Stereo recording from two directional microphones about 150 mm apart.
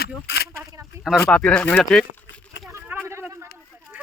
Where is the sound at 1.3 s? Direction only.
5° left (ahead or behind).